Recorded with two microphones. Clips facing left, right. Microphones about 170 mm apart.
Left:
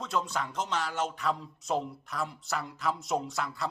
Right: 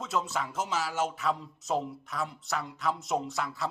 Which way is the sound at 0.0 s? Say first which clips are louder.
Even; centre (ahead or behind).